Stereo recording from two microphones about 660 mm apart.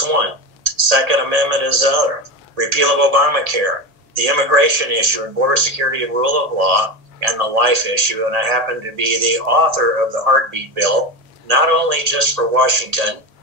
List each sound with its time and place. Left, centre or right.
0.0 s a man's voice: right